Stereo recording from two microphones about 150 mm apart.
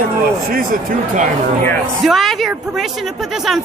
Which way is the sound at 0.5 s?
65° right (ahead or behind).